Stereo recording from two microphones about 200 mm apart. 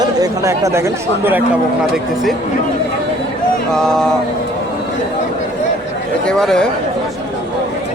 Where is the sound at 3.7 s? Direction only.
5° left (ahead or behind).